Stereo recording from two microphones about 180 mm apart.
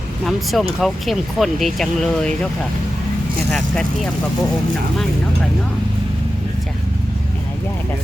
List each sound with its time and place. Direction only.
0.3 s speech: centre (ahead or behind)
3.5 s speech: 5° left (ahead or behind)